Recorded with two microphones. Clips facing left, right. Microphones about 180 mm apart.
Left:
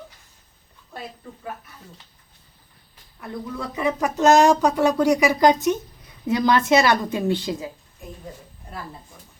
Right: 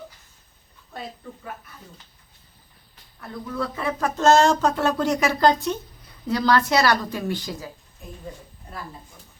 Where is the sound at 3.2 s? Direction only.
15° left (ahead or behind).